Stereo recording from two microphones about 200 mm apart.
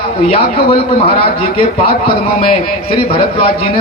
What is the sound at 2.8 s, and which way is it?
Speech, 25° left (ahead or behind).